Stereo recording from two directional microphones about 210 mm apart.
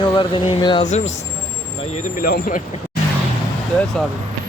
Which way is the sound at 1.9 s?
40° left (ahead or behind).